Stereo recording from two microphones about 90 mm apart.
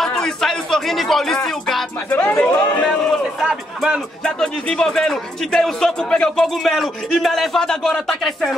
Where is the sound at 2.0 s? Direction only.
20° left (ahead or behind).